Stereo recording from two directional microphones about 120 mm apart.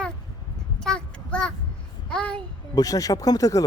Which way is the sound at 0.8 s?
5° left (ahead or behind).